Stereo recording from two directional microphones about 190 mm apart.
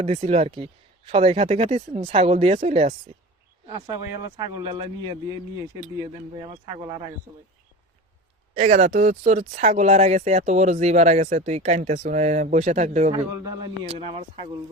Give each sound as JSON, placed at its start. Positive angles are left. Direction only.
{"t": 0.0, "sound": "speech", "side_deg": -35}
{"t": 3.7, "sound": "a man's voice", "side_deg": -20}
{"t": 8.5, "sound": "speech", "side_deg": -35}
{"t": 13.1, "sound": "a man's voice", "side_deg": -20}